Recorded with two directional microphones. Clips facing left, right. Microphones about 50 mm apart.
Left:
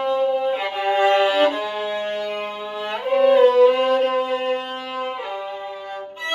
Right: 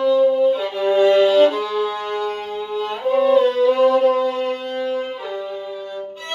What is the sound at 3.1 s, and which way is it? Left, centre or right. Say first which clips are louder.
Music: left 1 dB; left.